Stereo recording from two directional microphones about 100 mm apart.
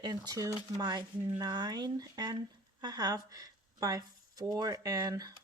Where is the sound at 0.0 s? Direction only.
40° right (ahead or behind).